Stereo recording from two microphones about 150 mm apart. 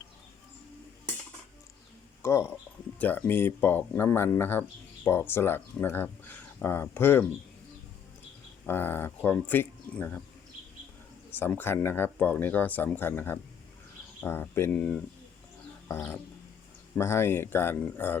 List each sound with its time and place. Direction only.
2.2 s speech: 15° left (ahead or behind)
8.6 s speech: 15° left (ahead or behind)
11.3 s speech: 15° left (ahead or behind)